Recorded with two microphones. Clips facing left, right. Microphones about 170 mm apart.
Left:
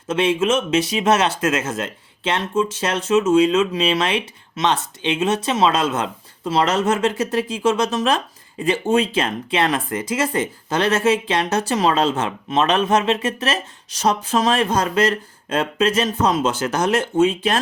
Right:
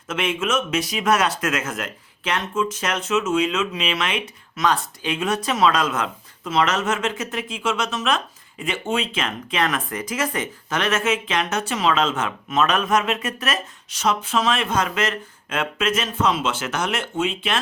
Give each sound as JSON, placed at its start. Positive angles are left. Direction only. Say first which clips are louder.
{"t": 0.1, "sound": "speech", "louder": "left 5 dB", "side_deg": 30}